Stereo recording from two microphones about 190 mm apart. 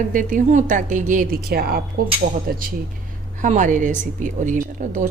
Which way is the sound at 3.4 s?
40° right (ahead or behind).